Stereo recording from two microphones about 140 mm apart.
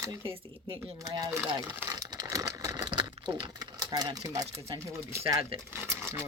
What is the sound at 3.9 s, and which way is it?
Speech, 30° right (ahead or behind).